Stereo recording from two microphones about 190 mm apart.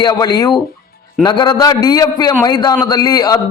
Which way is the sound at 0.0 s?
20° left (ahead or behind).